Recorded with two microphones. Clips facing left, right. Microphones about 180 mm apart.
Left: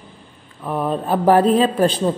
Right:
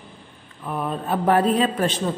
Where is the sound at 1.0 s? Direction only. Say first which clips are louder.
Left 4 dB; 35° left (ahead or behind).